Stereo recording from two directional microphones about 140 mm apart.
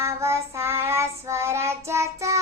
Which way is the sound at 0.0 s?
20° right (ahead or behind).